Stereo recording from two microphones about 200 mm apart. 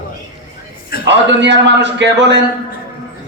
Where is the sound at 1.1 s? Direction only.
60° right (ahead or behind).